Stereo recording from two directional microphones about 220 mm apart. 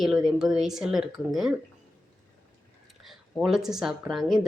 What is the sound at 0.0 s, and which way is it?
Speech, centre (ahead or behind).